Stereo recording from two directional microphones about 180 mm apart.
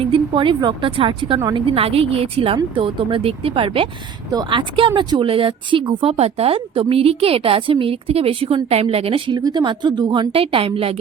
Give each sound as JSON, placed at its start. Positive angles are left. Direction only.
{"t": 0.0, "sound": "speech", "side_deg": -30}